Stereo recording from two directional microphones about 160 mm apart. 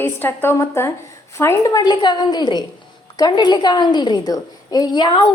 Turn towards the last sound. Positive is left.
turn(degrees=30)  # may be behind; listen again after turning